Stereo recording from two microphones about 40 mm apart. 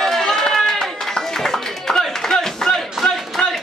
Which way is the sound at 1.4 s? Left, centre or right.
Centre.